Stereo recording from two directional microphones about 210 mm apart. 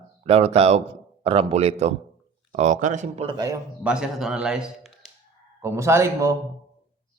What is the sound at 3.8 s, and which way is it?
A man's voice, 5° right (ahead or behind).